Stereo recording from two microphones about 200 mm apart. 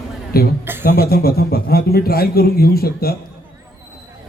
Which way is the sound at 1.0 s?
50° left (ahead or behind).